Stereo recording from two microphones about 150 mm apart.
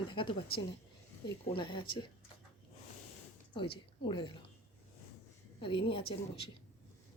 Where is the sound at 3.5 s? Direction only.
30° left (ahead or behind).